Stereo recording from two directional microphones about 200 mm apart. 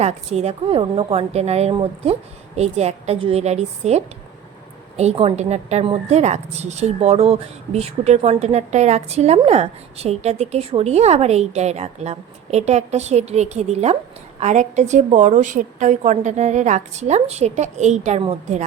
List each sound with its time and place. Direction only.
0.0 s a woman's voice: 35° right (ahead or behind)